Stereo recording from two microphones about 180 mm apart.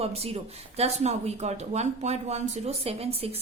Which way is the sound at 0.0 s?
35° right (ahead or behind).